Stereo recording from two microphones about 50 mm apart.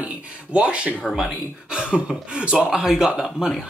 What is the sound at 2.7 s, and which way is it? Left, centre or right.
Speech, centre.